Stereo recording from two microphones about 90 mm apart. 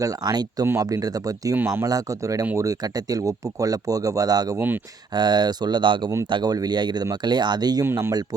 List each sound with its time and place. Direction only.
0.0 s speech: 45° right (ahead or behind)
4.5 s speech: 20° right (ahead or behind)
5.1 s speech: 55° right (ahead or behind)
7.9 s speech: 25° right (ahead or behind)